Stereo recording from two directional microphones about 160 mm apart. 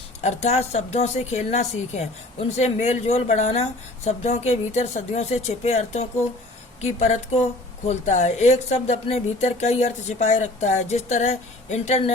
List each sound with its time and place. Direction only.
0.2 s speech: 45° left (ahead or behind)